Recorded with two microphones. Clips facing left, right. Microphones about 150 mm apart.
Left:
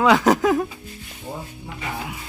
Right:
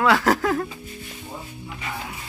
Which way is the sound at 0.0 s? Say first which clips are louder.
Left 3 dB; 20° left (ahead or behind).